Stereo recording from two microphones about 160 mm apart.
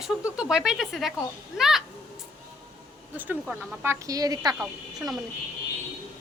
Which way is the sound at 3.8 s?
20° right (ahead or behind).